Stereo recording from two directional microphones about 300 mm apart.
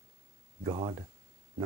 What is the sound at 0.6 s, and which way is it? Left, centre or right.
Speech, centre.